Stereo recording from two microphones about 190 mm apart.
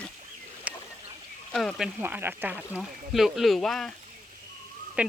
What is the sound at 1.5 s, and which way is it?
Speech, centre (ahead or behind).